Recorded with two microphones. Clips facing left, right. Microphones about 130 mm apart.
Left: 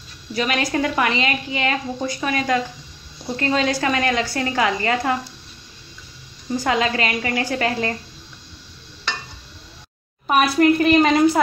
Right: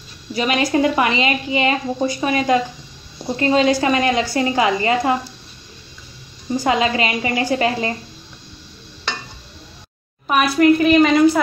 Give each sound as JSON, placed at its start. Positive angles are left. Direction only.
{"t": 0.3, "sound": "a woman's voice", "side_deg": -10}
{"t": 6.6, "sound": "a woman's voice", "side_deg": -10}
{"t": 10.3, "sound": "a woman's voice", "side_deg": 35}